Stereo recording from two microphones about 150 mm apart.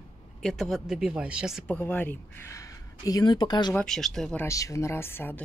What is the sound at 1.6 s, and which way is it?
Speech, 10° left (ahead or behind).